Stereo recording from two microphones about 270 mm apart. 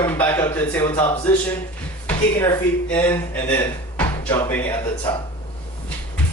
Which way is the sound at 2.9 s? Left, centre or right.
Centre.